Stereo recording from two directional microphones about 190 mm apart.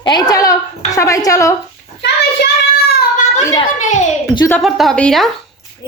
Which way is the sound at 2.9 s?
40° left (ahead or behind).